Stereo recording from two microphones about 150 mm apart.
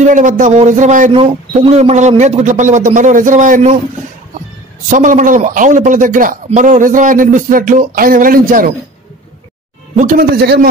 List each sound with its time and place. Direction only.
0.0 s a man's voice: 55° right (ahead or behind)
1.1 s speech: 40° right (ahead or behind); by 3.7 s 55° right (ahead or behind)
4.8 s a man's voice: 60° right (ahead or behind)
9.9 s speech: 70° right (ahead or behind); by 10.7 s 90° right